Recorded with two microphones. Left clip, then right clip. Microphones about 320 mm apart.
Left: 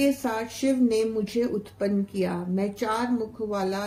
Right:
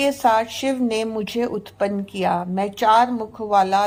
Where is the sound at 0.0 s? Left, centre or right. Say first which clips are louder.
Right 8 dB; centre.